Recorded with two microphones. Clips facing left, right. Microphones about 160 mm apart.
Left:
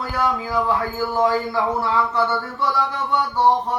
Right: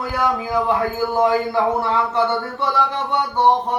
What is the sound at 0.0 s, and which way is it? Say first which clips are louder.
A man's voice: right 2 dB; 15° right (ahead or behind).